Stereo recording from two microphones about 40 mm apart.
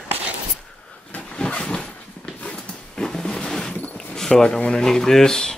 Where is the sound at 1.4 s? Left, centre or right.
Left.